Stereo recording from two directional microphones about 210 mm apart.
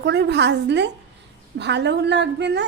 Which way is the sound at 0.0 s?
55° right (ahead or behind).